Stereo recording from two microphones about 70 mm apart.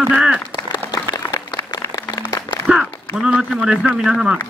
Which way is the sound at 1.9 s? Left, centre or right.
Left.